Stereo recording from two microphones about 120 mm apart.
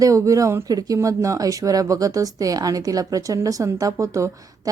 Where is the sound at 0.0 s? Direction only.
25° right (ahead or behind).